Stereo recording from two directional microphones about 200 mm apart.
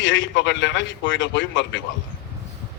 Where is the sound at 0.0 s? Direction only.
65° left (ahead or behind).